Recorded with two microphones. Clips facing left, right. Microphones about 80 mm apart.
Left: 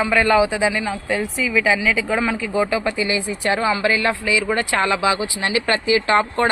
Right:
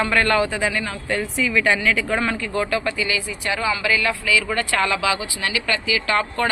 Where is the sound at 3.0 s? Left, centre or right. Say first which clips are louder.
Left 3 dB; left.